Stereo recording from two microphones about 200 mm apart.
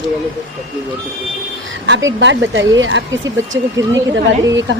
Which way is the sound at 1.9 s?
65° right (ahead or behind).